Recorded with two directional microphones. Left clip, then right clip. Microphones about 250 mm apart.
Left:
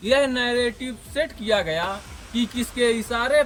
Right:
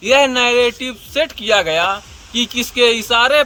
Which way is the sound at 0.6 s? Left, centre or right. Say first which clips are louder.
Right 9 dB; right.